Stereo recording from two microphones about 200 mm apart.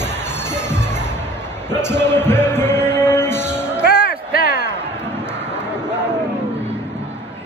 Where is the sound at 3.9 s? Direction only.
50° left (ahead or behind).